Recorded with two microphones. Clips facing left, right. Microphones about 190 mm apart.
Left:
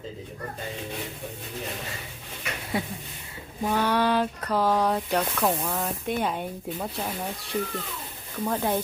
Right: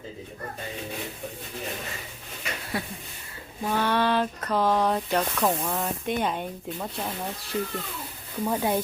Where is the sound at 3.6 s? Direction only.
10° left (ahead or behind).